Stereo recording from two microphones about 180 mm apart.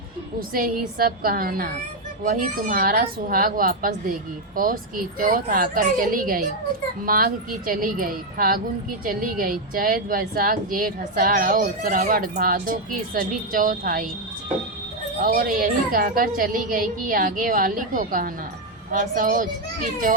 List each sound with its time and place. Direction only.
0.3 s a woman's voice: 50° right (ahead or behind)
15.2 s a woman's voice: 50° right (ahead or behind)